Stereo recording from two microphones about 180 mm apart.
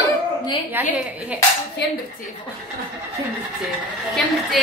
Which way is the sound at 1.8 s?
65° left (ahead or behind).